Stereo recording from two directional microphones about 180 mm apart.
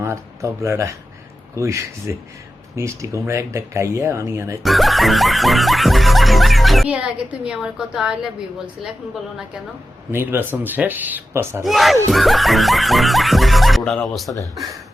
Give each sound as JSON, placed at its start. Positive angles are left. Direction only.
{"t": 0.0, "sound": "speech", "side_deg": -15}
{"t": 4.6, "sound": "music", "side_deg": 0}
{"t": 10.1, "sound": "speech", "side_deg": -10}
{"t": 11.6, "sound": "music", "side_deg": 0}